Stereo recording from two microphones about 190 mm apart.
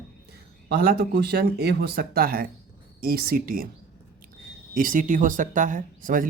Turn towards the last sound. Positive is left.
turn(degrees=-45)  # may be behind; listen again after turning